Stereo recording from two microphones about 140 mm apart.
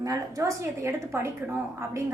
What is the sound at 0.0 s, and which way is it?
A woman's voice, 25° right (ahead or behind).